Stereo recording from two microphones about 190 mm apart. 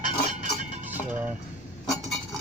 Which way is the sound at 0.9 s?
10° right (ahead or behind).